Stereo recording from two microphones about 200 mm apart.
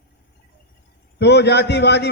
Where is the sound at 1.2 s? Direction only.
60° left (ahead or behind).